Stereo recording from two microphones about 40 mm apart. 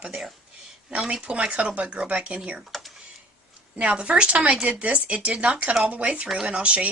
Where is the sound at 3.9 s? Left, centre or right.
Right.